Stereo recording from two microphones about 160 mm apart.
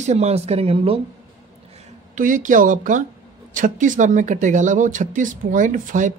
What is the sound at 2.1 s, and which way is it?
Speech, 55° right (ahead or behind).